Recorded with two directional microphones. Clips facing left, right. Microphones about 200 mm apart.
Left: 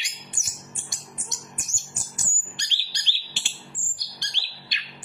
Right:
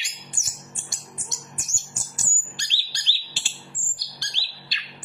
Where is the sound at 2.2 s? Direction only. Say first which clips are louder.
Even; 20° left (ahead or behind).